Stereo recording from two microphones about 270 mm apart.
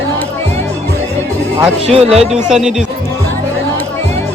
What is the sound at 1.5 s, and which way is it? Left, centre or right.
Speech, right.